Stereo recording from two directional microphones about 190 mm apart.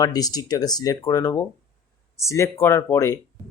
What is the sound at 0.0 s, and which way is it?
Speech, 20° left (ahead or behind).